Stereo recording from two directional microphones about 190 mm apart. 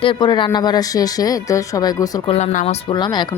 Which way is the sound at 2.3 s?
35° left (ahead or behind).